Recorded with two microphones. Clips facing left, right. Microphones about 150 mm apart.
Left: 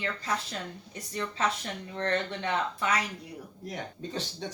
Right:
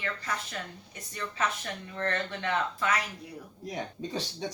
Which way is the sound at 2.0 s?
25° left (ahead or behind).